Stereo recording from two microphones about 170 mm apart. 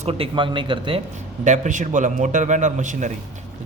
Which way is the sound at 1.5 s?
45° right (ahead or behind).